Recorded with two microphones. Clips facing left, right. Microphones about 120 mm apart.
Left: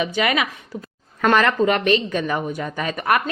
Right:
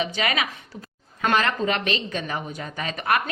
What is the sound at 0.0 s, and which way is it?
Speech, 50° left (ahead or behind).